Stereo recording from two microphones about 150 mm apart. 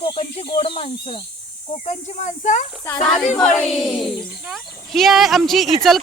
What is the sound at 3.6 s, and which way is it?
Speech, centre (ahead or behind).